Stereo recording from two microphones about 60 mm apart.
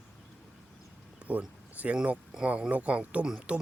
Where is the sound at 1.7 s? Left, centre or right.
Right.